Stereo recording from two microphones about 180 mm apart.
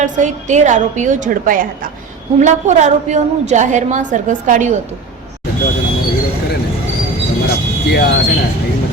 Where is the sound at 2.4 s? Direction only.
40° right (ahead or behind).